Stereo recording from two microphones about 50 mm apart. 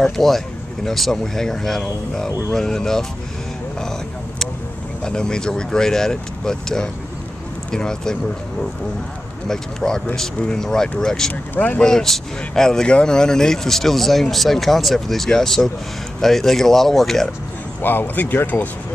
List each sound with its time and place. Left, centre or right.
0.0 s speech: centre
5.0 s speech: centre
9.5 s speech: centre
11.5 s speech: left
11.8 s speech: centre
17.8 s speech: left